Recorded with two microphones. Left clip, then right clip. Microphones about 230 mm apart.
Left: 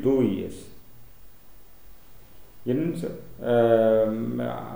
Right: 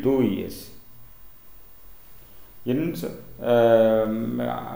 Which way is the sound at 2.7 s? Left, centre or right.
Centre.